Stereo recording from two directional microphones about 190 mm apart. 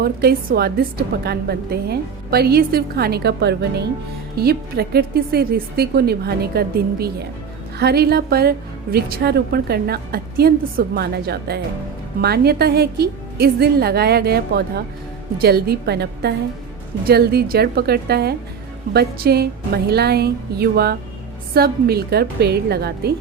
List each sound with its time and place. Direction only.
0.0 s a woman's voice: 55° right (ahead or behind)